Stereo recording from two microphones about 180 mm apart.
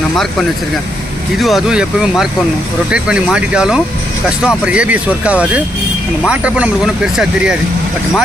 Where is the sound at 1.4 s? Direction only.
Centre (ahead or behind).